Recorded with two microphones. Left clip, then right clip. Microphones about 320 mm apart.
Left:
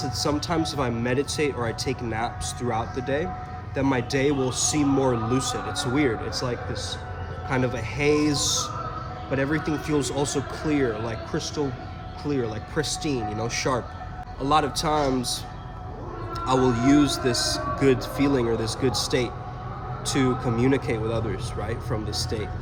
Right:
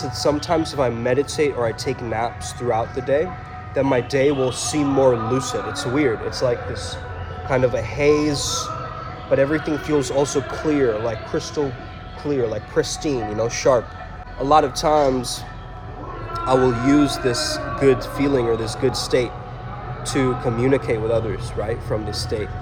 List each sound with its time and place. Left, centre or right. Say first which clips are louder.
0.0 s speech: right 5 dB; centre
16.3 s speech: right 5 dB; centre
20.4 s speech: right 4 dB; centre